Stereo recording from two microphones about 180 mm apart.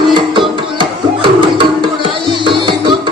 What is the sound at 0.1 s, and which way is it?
Music, 25° right (ahead or behind).